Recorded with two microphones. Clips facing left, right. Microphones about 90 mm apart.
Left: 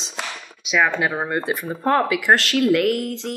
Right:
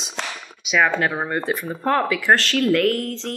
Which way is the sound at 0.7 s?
Centre (ahead or behind).